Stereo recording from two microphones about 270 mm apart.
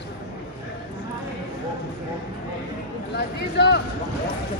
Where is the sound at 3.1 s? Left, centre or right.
Left.